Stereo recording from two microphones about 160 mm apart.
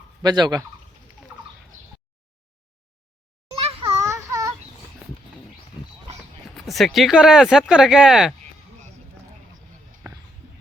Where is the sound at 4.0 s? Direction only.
20° right (ahead or behind).